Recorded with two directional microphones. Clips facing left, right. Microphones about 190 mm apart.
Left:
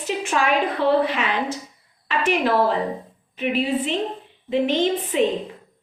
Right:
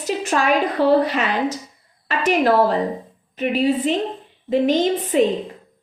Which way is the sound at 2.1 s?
40° right (ahead or behind).